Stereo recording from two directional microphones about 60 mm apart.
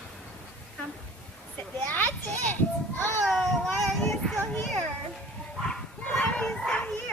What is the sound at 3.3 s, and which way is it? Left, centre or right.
Child singing, centre.